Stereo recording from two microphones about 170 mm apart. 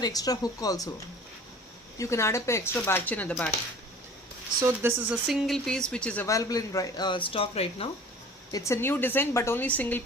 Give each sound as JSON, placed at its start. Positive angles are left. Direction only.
{"t": 0.0, "sound": "speech", "side_deg": 20}
{"t": 2.0, "sound": "speech", "side_deg": 15}
{"t": 4.6, "sound": "speech", "side_deg": -15}
{"t": 6.2, "sound": "speech", "side_deg": 20}
{"t": 8.5, "sound": "speech", "side_deg": 15}